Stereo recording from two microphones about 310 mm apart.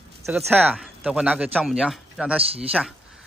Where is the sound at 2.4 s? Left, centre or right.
Centre.